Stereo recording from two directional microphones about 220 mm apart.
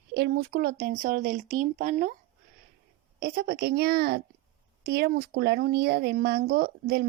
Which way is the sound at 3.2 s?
45° right (ahead or behind).